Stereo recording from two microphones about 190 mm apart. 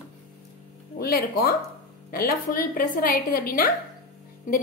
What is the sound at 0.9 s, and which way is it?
A woman's voice, 55° left (ahead or behind).